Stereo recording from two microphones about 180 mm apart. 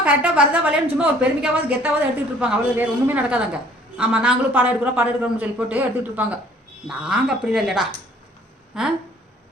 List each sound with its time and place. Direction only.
0.0 s a woman's voice: 5° right (ahead or behind)